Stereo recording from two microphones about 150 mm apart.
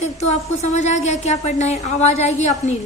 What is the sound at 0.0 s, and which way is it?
A woman's voice, 50° left (ahead or behind).